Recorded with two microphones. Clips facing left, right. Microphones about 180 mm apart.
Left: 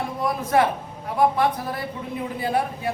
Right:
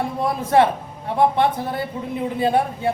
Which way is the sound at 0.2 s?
30° right (ahead or behind).